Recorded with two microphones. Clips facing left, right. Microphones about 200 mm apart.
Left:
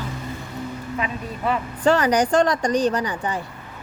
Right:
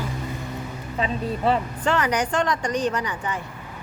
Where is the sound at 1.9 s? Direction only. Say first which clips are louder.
Left 6 dB; 35° left (ahead or behind).